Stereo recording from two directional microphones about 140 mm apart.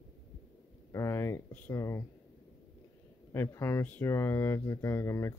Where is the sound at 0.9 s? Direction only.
20° left (ahead or behind).